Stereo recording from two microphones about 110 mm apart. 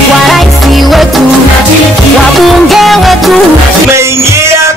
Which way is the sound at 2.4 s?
Centre (ahead or behind).